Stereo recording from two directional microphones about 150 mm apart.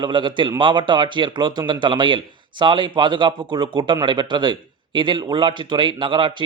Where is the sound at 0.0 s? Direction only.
30° right (ahead or behind).